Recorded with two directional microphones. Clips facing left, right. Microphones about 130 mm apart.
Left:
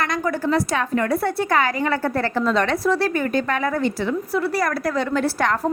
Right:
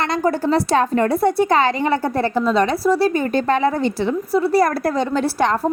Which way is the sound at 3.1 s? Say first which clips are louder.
Right 4 dB; 25° right (ahead or behind).